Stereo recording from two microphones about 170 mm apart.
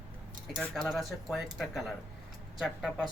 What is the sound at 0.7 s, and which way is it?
Speech, centre (ahead or behind).